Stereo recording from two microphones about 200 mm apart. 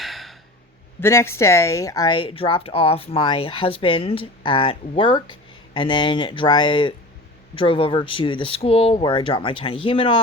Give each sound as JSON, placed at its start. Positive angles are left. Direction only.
{"t": 0.0, "sound": "gasp", "side_deg": 0}
{"t": 1.0, "sound": "speech", "side_deg": 10}